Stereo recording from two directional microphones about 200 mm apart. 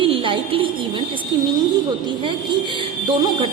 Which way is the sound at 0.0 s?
25° right (ahead or behind).